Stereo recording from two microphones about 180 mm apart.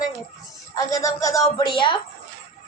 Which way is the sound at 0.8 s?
20° left (ahead or behind).